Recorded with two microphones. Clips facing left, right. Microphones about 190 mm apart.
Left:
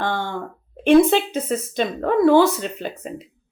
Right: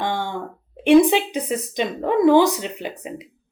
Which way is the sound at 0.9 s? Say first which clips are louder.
Even; 15° right (ahead or behind).